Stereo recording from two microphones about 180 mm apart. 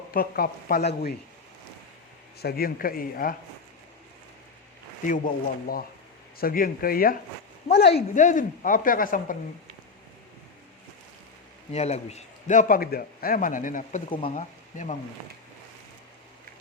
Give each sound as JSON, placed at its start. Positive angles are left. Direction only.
{"t": 0.1, "sound": "speech", "side_deg": 55}
{"t": 2.4, "sound": "a man's voice", "side_deg": 60}
{"t": 5.0, "sound": "a man's voice", "side_deg": 50}
{"t": 7.8, "sound": "speech", "side_deg": 65}
{"t": 8.1, "sound": "a man's voice", "side_deg": 45}
{"t": 11.7, "sound": "a man's voice", "side_deg": 35}
{"t": 14.1, "sound": "speech", "side_deg": 30}